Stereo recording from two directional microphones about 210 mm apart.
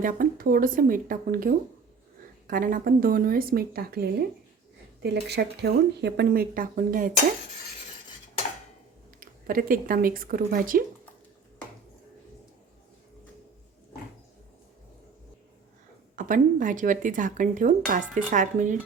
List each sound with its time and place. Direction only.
0.0 s speech: 40° right (ahead or behind)
5.3 s speech: 50° right (ahead or behind)
9.2 s speech: 45° right (ahead or behind)
16.1 s speech: 40° right (ahead or behind)